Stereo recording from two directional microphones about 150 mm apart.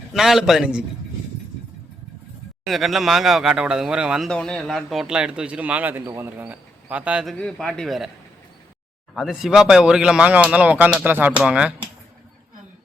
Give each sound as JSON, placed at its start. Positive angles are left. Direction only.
{"t": 0.1, "sound": "speech", "side_deg": 0}
{"t": 2.6, "sound": "speech", "side_deg": 0}
{"t": 4.3, "sound": "speech", "side_deg": 5}
{"t": 7.3, "sound": "speech", "side_deg": 5}
{"t": 9.1, "sound": "speech", "side_deg": 0}